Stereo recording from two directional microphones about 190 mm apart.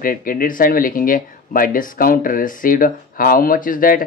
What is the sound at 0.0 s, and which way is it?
Speech, 50° left (ahead or behind).